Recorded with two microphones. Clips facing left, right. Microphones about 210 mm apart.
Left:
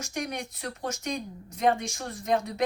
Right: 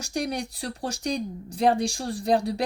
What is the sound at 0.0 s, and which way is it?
Speech, 35° right (ahead or behind).